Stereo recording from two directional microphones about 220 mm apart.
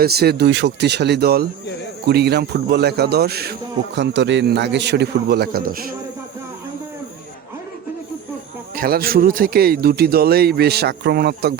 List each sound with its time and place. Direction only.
0.0 s a man's voice: 45° right (ahead or behind)
8.7 s a man's voice: 40° right (ahead or behind)